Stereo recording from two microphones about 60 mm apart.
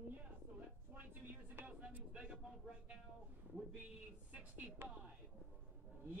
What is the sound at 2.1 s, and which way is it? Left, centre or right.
Speech, centre.